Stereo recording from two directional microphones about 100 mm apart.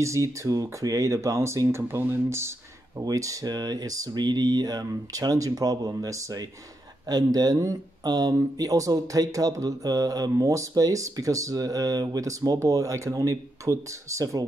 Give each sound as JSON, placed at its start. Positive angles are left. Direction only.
{"t": 0.0, "sound": "speech", "side_deg": -30}